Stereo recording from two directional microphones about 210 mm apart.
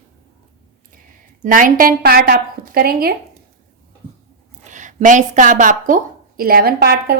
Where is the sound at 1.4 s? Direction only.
40° right (ahead or behind).